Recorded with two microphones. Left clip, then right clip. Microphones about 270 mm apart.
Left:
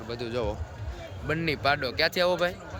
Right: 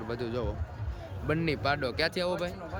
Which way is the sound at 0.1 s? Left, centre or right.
Centre.